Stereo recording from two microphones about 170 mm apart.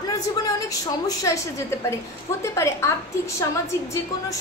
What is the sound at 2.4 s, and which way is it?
A woman's voice, 15° left (ahead or behind).